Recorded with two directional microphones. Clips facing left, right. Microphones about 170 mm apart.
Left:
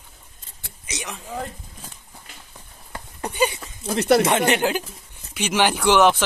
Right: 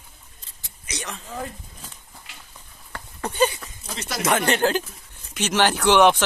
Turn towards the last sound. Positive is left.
turn(degrees=5)  # may be behind; listen again after turning